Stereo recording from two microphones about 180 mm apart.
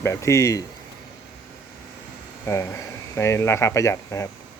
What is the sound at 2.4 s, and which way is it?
Speech, 15° left (ahead or behind).